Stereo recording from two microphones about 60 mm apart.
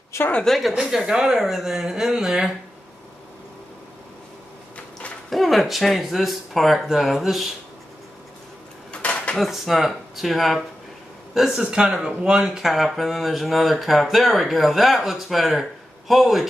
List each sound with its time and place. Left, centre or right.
0.5 s speech: centre
0.7 s speech: centre
5.3 s speech: centre
8.9 s dishes: centre
9.4 s speech: centre
12.4 s speech: centre